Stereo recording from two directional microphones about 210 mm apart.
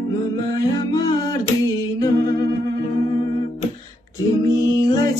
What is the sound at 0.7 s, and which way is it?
Music, 20° left (ahead or behind).